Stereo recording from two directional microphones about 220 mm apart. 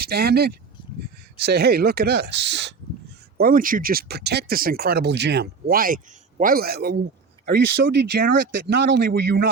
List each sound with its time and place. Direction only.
0.0 s speech: 45° right (ahead or behind)
3.3 s speech: 40° right (ahead or behind)